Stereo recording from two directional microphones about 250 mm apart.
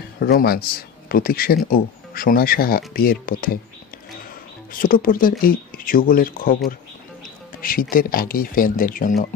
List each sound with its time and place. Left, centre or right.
0.2 s speech: left
4.7 s speech: left
7.9 s speech: left